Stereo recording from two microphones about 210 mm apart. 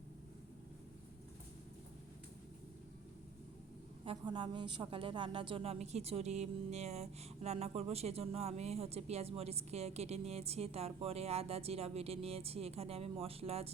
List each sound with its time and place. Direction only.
4.0 s speech: 25° right (ahead or behind)